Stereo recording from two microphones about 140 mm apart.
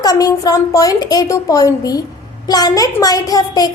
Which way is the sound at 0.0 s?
25° left (ahead or behind).